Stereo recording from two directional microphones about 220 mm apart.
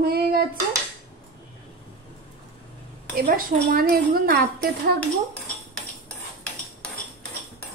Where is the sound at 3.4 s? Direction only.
40° right (ahead or behind).